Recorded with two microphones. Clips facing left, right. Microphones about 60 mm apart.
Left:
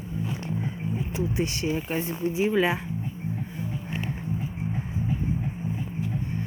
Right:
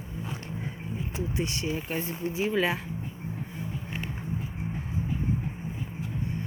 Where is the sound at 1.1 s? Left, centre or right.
Left.